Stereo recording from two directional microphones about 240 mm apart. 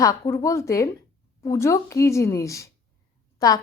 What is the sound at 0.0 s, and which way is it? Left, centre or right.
A woman's voice, centre.